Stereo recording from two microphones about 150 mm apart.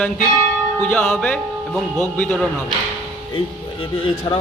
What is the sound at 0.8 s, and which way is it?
Speech, 10° left (ahead or behind).